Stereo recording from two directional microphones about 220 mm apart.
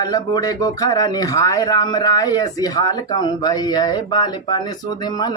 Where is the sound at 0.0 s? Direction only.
15° left (ahead or behind).